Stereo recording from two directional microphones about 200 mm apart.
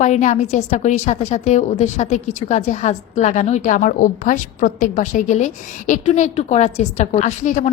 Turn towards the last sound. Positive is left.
turn(degrees=35)  # may be behind; listen again after turning